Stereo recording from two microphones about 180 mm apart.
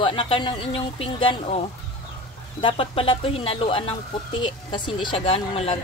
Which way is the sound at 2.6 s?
30° left (ahead or behind).